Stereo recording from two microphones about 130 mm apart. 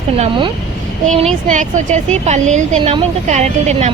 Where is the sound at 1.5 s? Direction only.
70° right (ahead or behind).